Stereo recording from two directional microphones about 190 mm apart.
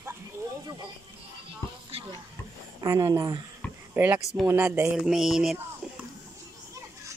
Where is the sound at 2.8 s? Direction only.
15° right (ahead or behind); by 5.6 s centre (ahead or behind).